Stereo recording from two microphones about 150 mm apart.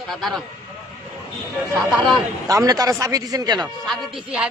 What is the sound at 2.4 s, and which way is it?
Speech, 25° right (ahead or behind).